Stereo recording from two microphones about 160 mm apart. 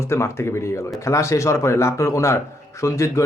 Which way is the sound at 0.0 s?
15° left (ahead or behind).